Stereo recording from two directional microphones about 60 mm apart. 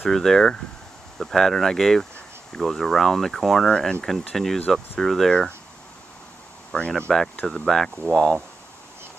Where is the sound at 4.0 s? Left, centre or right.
Centre.